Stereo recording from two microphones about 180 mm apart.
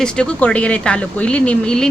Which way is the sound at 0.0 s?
5° left (ahead or behind).